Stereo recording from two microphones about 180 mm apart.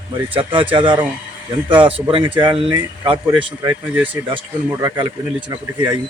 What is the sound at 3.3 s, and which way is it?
Speech, 10° right (ahead or behind).